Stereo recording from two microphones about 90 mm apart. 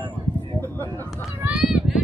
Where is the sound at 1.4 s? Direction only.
10° right (ahead or behind).